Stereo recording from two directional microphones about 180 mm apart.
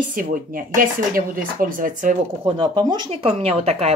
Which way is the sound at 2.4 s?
25° right (ahead or behind).